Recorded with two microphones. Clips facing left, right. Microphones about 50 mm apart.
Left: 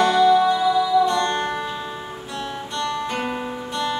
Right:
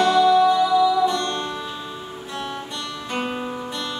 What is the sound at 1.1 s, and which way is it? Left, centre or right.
Music, left.